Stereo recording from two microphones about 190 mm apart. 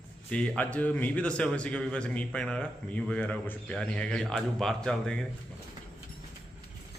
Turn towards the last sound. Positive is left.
turn(degrees=5)  # may be behind; listen again after turning